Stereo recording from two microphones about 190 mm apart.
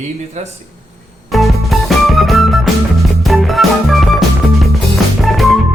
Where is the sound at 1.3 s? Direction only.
Centre (ahead or behind).